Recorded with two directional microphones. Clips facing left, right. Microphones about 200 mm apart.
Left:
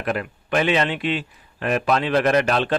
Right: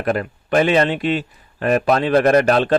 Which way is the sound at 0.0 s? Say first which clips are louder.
Right 5 dB; 40° right (ahead or behind).